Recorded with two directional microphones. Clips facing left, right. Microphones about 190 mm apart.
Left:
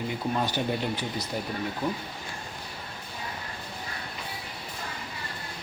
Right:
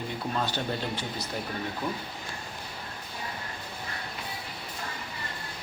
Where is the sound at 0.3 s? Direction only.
15° left (ahead or behind).